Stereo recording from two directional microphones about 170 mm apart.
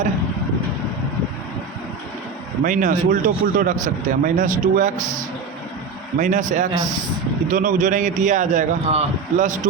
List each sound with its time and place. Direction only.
2.6 s speech: 50° right (ahead or behind)
6.1 s speech: 45° right (ahead or behind)